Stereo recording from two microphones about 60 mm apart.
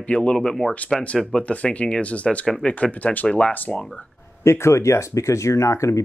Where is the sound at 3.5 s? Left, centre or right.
Left.